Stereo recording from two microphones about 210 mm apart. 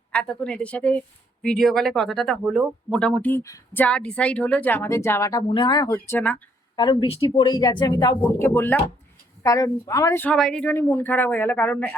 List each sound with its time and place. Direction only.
0.1 s speech: 5° left (ahead or behind)
6.7 s speech: 20° left (ahead or behind)